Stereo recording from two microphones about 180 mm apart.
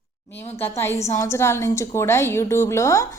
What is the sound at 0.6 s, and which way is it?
A woman's voice, 15° left (ahead or behind).